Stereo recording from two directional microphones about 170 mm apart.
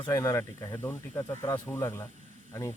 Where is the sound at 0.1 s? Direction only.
15° left (ahead or behind).